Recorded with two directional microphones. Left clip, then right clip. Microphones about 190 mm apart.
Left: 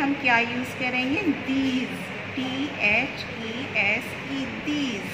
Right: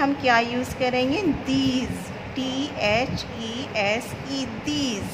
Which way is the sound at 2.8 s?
60° right (ahead or behind).